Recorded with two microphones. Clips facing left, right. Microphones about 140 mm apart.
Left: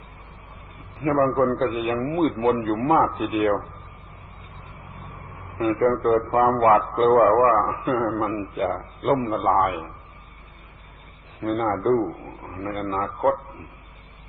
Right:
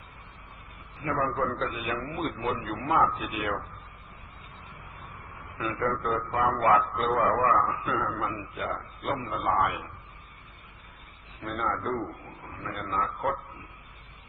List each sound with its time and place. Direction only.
1.4 s a man's voice: 50° left (ahead or behind)
5.5 s a man's voice: 45° left (ahead or behind)
11.3 s a man's voice: 45° left (ahead or behind)